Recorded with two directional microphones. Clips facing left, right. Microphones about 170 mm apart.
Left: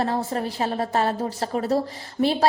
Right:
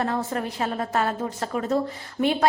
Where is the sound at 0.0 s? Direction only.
30° left (ahead or behind).